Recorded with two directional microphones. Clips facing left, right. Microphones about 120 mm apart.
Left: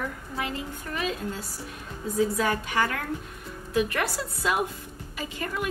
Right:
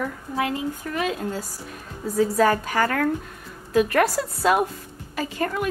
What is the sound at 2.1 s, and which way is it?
Speech, 40° right (ahead or behind).